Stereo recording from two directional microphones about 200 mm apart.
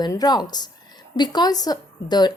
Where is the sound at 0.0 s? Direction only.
20° left (ahead or behind).